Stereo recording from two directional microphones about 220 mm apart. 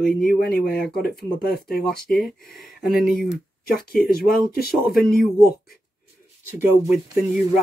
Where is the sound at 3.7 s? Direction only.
40° left (ahead or behind).